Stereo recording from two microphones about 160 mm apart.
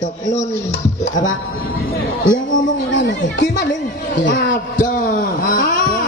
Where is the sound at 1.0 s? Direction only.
50° left (ahead or behind).